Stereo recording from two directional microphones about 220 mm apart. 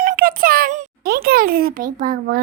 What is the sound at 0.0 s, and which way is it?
A child's voice, 40° right (ahead or behind).